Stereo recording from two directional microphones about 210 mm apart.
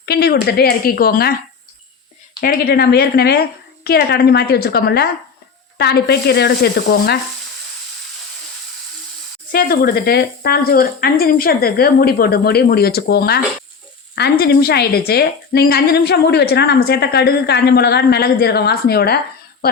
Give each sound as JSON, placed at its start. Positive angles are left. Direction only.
{"t": 0.0, "sound": "a woman's voice", "side_deg": 50}
{"t": 2.4, "sound": "a woman's voice", "side_deg": 45}
{"t": 9.5, "sound": "a woman's voice", "side_deg": 45}